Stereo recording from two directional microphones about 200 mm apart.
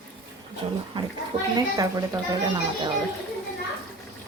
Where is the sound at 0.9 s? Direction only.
25° right (ahead or behind).